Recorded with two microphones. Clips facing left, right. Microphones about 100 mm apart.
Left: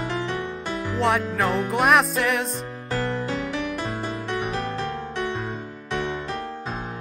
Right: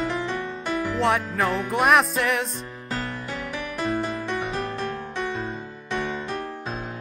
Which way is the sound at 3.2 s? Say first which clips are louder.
Left 4 dB; 20° left (ahead or behind).